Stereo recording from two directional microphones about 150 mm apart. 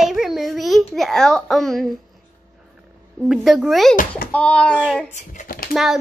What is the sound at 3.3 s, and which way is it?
A child's voice, centre (ahead or behind).